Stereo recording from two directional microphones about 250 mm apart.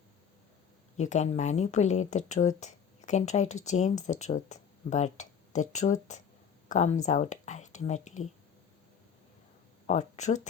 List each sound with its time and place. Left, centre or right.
0.9 s speech: left
9.8 s speech: left